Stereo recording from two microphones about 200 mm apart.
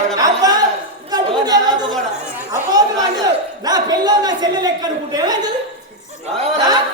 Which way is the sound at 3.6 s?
20° right (ahead or behind).